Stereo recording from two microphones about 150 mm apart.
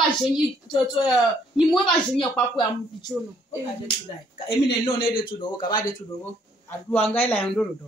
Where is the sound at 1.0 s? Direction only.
5° right (ahead or behind).